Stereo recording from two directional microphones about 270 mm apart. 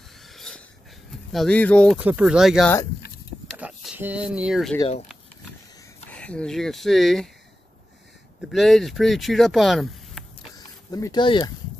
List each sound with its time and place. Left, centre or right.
0.2 s a sound: centre
1.3 s speech: centre
3.5 s speech: centre
4.7 s speech: left
6.1 s speech: centre
8.4 s speech: centre
10.5 s a sound: centre